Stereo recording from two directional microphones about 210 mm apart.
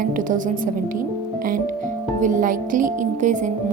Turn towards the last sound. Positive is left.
turn(degrees=-35)  # may be behind; listen again after turning